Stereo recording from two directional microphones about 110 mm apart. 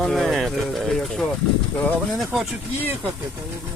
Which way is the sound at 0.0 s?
Centre (ahead or behind).